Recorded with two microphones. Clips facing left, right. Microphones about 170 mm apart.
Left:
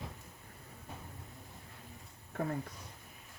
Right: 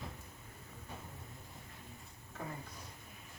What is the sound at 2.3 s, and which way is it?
Speech, 60° left (ahead or behind).